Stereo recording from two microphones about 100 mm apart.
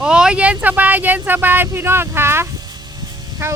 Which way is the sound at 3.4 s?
30° right (ahead or behind).